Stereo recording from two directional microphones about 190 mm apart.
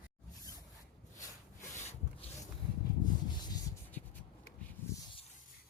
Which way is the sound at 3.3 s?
20° left (ahead or behind).